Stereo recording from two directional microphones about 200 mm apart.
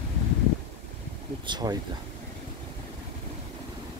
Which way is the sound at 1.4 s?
20° right (ahead or behind).